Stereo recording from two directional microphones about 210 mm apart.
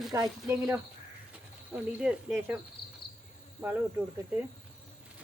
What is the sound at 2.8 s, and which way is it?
Cricket, 50° left (ahead or behind).